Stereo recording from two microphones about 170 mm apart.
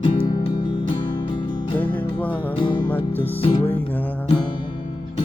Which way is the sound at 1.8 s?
10° left (ahead or behind).